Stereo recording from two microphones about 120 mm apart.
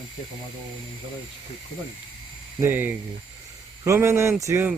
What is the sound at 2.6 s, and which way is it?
Speech, 15° right (ahead or behind).